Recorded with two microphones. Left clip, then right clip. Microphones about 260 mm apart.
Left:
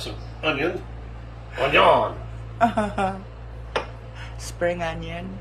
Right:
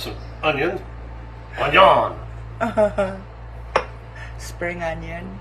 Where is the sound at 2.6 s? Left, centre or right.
Centre.